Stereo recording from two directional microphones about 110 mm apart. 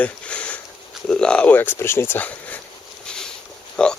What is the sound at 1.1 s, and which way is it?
Speech, 10° left (ahead or behind).